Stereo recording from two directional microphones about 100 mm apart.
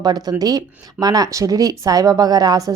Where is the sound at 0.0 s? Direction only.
40° right (ahead or behind).